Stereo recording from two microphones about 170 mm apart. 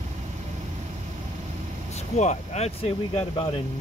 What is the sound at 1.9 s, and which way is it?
Speech, 45° left (ahead or behind).